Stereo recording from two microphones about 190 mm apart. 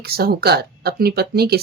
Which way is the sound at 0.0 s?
55° right (ahead or behind).